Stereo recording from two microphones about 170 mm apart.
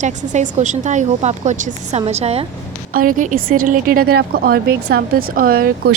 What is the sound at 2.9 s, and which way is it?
A woman's voice, 55° right (ahead or behind).